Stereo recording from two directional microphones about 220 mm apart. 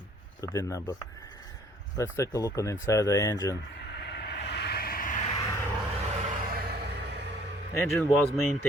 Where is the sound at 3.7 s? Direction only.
50° left (ahead or behind).